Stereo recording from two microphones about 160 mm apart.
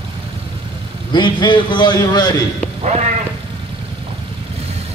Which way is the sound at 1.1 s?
30° left (ahead or behind).